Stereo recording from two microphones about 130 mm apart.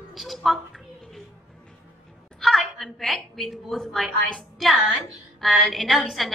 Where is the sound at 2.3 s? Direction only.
Centre (ahead or behind).